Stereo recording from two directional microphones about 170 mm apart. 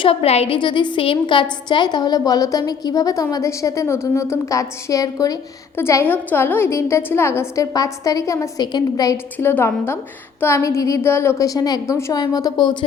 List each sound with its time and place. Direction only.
0.0 s a woman's voice: 35° left (ahead or behind)